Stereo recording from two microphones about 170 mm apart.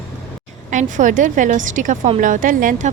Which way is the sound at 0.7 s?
50° right (ahead or behind).